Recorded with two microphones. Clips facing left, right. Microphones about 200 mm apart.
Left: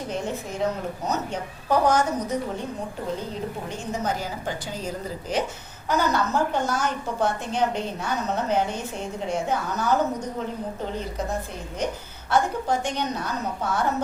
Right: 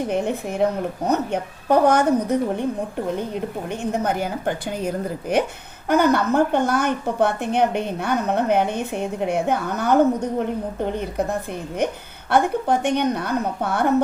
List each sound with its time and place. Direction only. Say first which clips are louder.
0.1 s a woman's voice: right 6 dB; 60° right (ahead or behind)
3.9 s a woman's voice: right 4 dB; 60° right (ahead or behind)